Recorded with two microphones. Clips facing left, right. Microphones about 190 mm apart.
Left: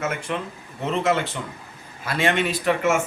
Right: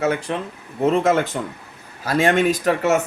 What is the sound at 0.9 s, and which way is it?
Speech, 45° right (ahead or behind).